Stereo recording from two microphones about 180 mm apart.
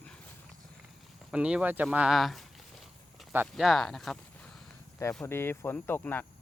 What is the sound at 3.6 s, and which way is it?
Speech, centre (ahead or behind).